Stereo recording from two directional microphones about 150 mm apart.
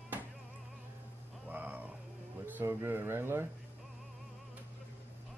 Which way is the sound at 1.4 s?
10° right (ahead or behind).